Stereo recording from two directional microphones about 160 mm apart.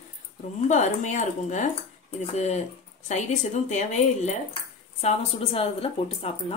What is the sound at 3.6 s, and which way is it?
Speech, 45° left (ahead or behind).